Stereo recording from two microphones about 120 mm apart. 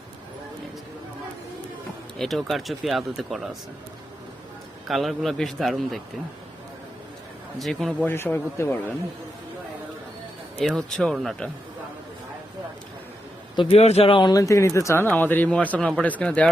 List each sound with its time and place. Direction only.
2.1 s speech: centre (ahead or behind)
4.9 s speech: centre (ahead or behind)
7.6 s speech: centre (ahead or behind)
8.0 s a man's voice: 20° left (ahead or behind)
10.6 s speech: 5° left (ahead or behind)
13.6 s speech: 55° left (ahead or behind)
14.3 s a man's voice: 25° left (ahead or behind); by 16.5 s 10° left (ahead or behind)